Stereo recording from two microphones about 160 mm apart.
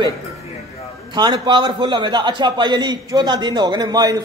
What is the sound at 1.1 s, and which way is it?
A man's voice, 30° right (ahead or behind).